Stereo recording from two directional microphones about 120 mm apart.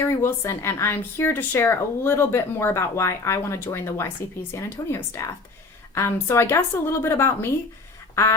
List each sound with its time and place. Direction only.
0.0 s speech: 20° left (ahead or behind)
8.1 s duck: 25° left (ahead or behind)